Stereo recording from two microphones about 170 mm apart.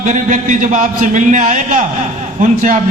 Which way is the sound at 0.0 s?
50° right (ahead or behind).